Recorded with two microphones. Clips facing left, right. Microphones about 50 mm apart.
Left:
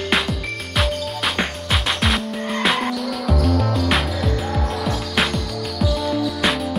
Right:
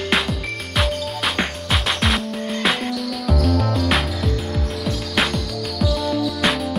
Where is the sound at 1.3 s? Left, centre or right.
Centre.